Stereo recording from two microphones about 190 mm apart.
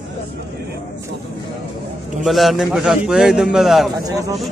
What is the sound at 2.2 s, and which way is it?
A man's voice, centre (ahead or behind).